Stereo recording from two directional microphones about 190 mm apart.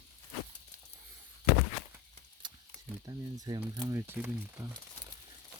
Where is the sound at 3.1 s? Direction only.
20° right (ahead or behind).